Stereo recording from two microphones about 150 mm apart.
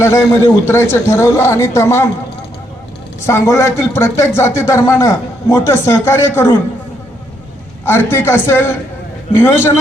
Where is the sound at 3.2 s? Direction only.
20° left (ahead or behind).